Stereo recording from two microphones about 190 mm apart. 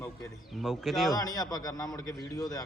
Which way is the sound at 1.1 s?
20° left (ahead or behind).